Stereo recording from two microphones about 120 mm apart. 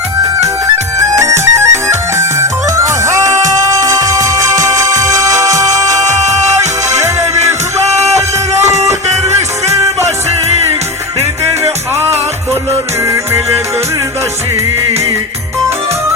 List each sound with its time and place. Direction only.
0.9 s music: 25° right (ahead or behind)
7.9 s music: 25° right (ahead or behind)